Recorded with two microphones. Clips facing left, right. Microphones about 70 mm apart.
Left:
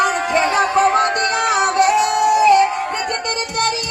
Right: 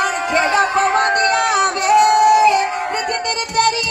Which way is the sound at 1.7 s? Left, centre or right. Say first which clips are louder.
Left 3 dB; left.